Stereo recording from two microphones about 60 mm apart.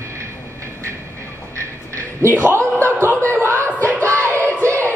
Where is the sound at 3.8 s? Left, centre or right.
Left.